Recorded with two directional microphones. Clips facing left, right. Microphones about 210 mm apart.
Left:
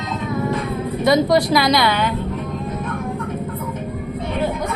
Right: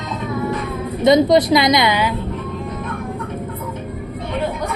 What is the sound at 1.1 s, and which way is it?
A woman's voice, 20° right (ahead or behind).